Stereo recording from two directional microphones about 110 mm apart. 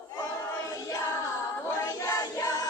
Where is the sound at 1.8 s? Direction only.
30° left (ahead or behind).